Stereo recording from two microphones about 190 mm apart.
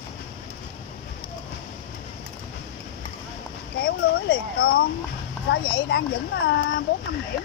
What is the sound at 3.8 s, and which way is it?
Speech, 50° left (ahead or behind).